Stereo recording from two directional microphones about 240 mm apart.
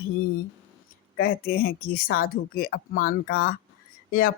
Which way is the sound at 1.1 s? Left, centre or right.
Left.